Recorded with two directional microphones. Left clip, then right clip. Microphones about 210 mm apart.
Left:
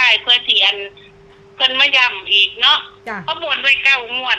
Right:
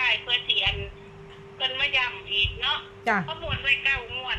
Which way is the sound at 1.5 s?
55° left (ahead or behind).